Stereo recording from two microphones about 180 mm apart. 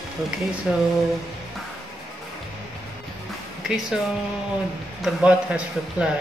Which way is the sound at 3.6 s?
Centre (ahead or behind).